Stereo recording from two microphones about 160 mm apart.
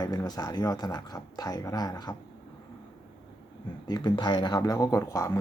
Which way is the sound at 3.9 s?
25° left (ahead or behind).